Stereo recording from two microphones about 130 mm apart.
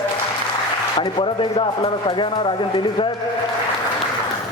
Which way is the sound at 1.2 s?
50° left (ahead or behind).